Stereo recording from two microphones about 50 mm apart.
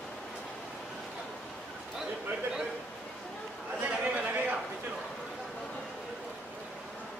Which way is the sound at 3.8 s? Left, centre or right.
Right.